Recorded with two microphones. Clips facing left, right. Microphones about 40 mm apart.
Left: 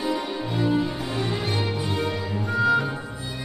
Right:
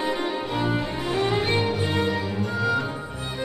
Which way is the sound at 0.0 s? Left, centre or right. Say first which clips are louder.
Right 1 dB; right.